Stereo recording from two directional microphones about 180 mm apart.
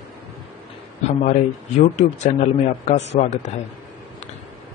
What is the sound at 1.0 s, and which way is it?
A man's voice, 40° left (ahead or behind).